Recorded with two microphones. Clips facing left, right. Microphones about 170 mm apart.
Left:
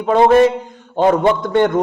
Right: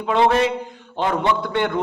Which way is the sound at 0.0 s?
45° left (ahead or behind).